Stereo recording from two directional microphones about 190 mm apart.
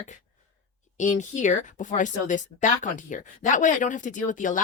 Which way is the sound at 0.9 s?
40° left (ahead or behind).